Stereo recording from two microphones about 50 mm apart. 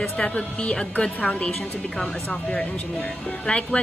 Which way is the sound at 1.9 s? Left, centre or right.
Centre.